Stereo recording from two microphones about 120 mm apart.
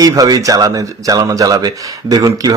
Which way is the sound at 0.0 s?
30° right (ahead or behind).